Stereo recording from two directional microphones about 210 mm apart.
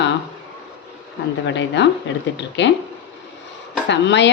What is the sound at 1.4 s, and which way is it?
Speech, 55° left (ahead or behind).